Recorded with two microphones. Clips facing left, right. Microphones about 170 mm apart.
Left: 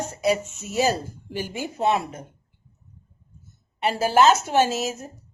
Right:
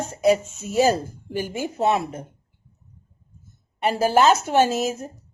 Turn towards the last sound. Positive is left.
turn(degrees=-55)  # may be behind; listen again after turning